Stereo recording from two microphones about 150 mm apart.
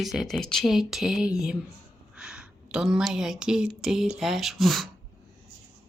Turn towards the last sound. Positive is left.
turn(degrees=0)  # may be behind; listen again after turning